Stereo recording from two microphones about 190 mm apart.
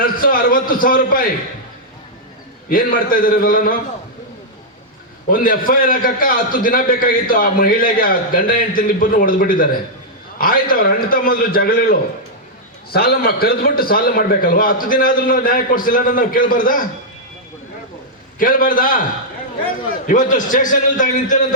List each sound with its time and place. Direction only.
0.0 s a sound: 50° left (ahead or behind)
2.6 s a man's voice: 50° left (ahead or behind)
5.3 s a man's voice: 45° left (ahead or behind)
18.3 s a man's voice: 45° left (ahead or behind)
20.1 s a man's voice: 45° left (ahead or behind)